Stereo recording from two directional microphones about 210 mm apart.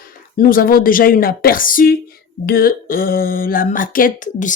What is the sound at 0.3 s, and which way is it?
A woman's voice, 40° left (ahead or behind).